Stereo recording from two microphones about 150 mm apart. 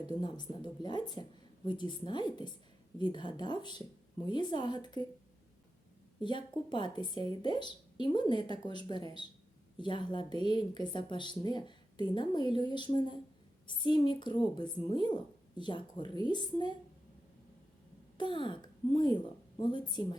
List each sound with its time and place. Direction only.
0.2 s speech: 30° left (ahead or behind)
6.2 s a woman's voice: 30° left (ahead or behind)
18.2 s speech: 30° left (ahead or behind)